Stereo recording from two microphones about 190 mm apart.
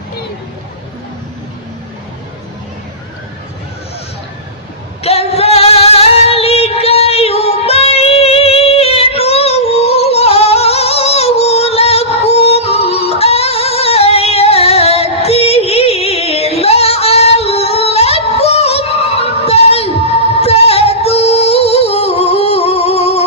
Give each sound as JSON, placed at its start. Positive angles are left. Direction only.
{"t": 5.0, "sound": "female singing", "side_deg": 30}
{"t": 20.4, "sound": "music", "side_deg": 30}